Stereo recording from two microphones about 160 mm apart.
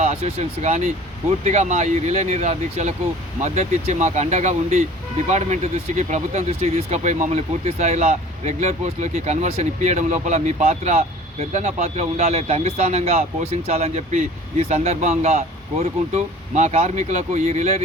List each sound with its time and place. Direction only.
0.0 s speech: 45° right (ahead or behind)